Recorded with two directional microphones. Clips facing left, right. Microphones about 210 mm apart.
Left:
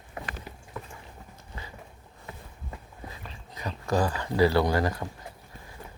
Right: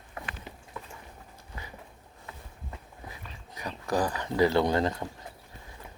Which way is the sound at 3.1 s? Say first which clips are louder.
Left 2 dB; 15° right (ahead or behind).